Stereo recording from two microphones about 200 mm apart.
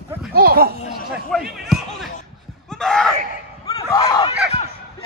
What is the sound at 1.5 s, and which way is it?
Basketball bounce, centre (ahead or behind).